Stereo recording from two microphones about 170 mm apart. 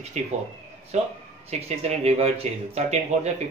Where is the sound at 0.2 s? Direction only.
40° right (ahead or behind).